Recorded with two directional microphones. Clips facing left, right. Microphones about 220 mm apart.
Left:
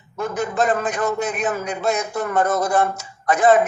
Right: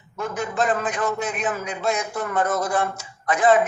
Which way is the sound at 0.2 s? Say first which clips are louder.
Left 3 dB; 40° left (ahead or behind).